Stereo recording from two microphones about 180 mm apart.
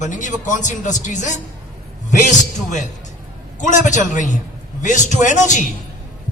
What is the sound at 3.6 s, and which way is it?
A man's voice, 45° left (ahead or behind).